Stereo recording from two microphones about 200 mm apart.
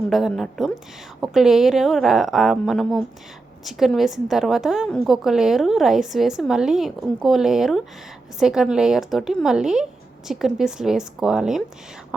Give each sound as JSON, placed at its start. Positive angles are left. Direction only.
{"t": 0.1, "sound": "a woman's voice", "side_deg": 0}